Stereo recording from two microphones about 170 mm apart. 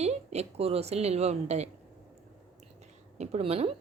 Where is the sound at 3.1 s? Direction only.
40° right (ahead or behind).